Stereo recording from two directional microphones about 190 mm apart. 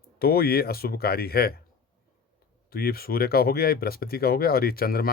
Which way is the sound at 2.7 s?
55° left (ahead or behind).